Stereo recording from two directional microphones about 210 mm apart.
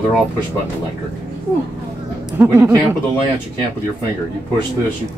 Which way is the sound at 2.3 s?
10° right (ahead or behind).